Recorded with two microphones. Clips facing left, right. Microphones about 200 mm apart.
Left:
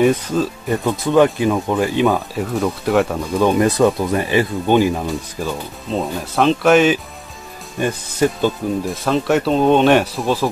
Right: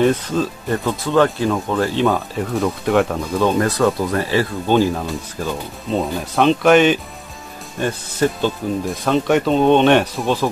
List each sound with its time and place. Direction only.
0.0 s speech: 10° left (ahead or behind)
2.1 s speech: centre (ahead or behind)
5.5 s speech: centre (ahead or behind)
7.8 s speech: 10° left (ahead or behind)
8.8 s speech: centre (ahead or behind)